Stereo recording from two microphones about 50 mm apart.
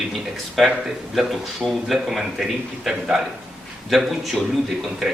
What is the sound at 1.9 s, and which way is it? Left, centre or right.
Speech, centre.